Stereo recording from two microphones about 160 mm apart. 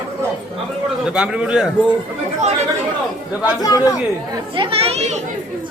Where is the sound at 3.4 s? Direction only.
20° left (ahead or behind).